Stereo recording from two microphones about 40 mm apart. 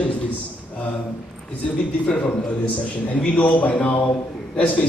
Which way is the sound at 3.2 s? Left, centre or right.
Left.